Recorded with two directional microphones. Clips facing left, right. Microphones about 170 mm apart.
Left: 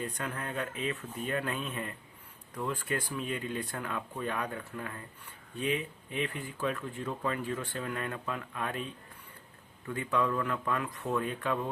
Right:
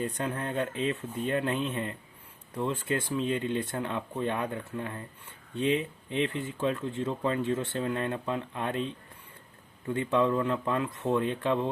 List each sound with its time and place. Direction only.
0.0 s speech: 30° right (ahead or behind)